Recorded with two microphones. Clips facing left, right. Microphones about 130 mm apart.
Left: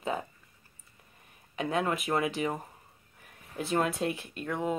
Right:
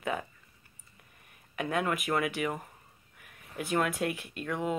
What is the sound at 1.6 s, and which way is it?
Speech, 30° left (ahead or behind).